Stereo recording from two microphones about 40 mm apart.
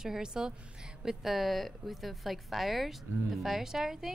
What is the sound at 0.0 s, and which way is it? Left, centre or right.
Speech, centre.